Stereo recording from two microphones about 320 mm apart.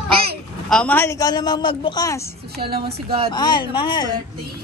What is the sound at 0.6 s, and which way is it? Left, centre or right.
A man's voice, centre.